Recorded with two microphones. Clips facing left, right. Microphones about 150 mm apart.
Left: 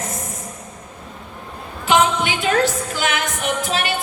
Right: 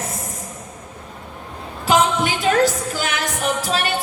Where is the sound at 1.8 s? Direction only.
40° right (ahead or behind).